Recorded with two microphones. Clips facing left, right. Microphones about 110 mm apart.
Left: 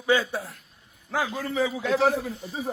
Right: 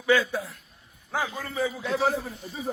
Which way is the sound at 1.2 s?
90° left.